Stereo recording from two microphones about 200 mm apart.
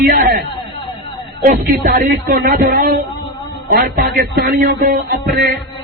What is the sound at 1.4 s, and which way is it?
Speech, 40° right (ahead or behind).